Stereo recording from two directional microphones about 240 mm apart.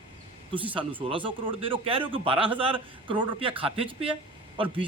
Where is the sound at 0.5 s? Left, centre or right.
Right.